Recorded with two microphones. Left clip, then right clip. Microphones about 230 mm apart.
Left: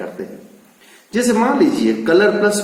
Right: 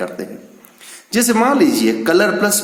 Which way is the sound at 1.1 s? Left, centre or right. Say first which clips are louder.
Right 1 dB; right.